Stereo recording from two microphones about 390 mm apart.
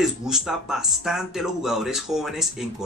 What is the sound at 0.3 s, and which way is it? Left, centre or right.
Speech, centre.